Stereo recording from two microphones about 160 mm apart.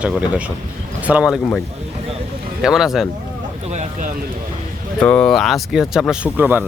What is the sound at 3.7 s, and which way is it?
Speech, 50° right (ahead or behind).